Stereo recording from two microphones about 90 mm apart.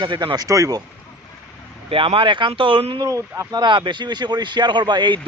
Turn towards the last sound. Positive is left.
turn(degrees=-55)  # may be behind; listen again after turning